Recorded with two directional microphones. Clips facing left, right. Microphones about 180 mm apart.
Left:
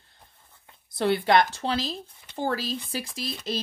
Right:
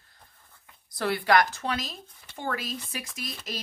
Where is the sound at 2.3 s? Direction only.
30° left (ahead or behind).